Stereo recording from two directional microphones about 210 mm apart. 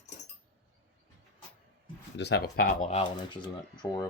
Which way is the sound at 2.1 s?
55° left (ahead or behind).